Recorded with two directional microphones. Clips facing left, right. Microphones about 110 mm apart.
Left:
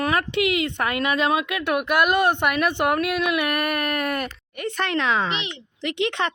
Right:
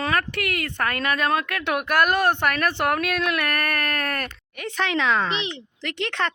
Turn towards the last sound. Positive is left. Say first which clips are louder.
# left 3 dB
turn(degrees=15)  # may be behind; listen again after turning